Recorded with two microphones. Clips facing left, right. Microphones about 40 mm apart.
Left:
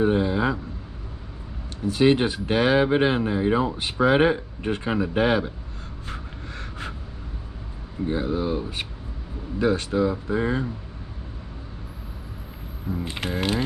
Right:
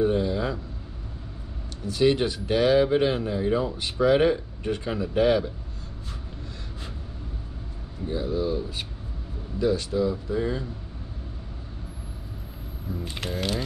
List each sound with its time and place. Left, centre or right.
0.0 s a sound: left
1.9 s speech: left
8.1 s speech: left
12.9 s speech: left